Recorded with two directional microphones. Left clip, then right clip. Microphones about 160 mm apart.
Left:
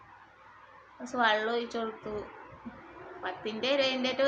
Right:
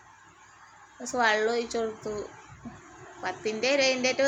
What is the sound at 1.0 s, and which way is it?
A woman's voice, 20° right (ahead or behind).